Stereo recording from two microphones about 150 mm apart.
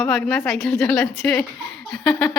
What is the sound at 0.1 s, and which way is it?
A woman's voice, centre (ahead or behind).